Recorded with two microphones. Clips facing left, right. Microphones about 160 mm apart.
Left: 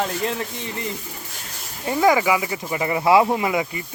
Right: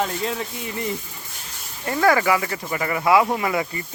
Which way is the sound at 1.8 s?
15° left (ahead or behind).